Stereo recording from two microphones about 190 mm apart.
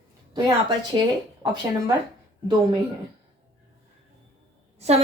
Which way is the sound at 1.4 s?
20° right (ahead or behind).